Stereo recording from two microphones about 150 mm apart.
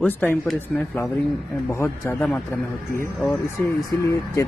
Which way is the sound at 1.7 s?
15° left (ahead or behind).